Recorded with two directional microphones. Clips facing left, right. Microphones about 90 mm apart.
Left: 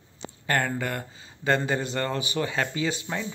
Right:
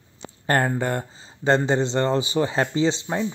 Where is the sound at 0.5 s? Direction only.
30° right (ahead or behind).